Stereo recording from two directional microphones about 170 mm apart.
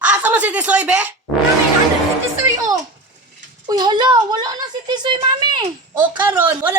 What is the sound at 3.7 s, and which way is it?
Speech, 25° right (ahead or behind).